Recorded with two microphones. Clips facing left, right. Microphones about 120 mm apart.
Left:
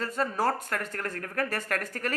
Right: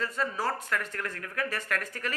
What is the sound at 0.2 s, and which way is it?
Speech, 45° left (ahead or behind).